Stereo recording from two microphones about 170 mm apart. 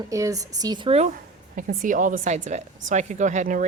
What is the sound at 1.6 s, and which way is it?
Speech, 50° right (ahead or behind).